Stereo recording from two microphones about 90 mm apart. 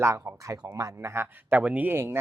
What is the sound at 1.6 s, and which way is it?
Speech, 15° right (ahead or behind).